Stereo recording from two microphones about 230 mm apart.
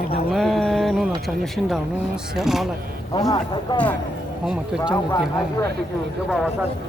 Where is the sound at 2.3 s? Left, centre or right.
Centre.